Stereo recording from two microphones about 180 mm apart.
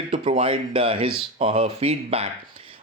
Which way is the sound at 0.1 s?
30° right (ahead or behind).